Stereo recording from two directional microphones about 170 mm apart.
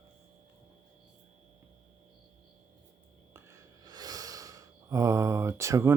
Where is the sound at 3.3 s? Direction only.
15° right (ahead or behind).